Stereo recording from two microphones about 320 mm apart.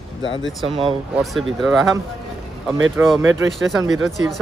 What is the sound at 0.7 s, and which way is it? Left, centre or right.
Speech, centre.